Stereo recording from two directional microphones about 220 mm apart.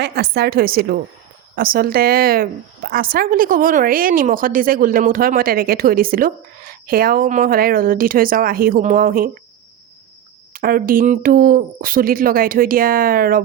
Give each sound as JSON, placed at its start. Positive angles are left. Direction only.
{"t": 0.0, "sound": "a woman's voice", "side_deg": -45}
{"t": 10.5, "sound": "a woman's voice", "side_deg": -40}